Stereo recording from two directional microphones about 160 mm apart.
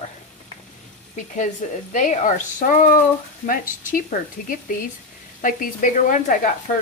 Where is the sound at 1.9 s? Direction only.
50° left (ahead or behind).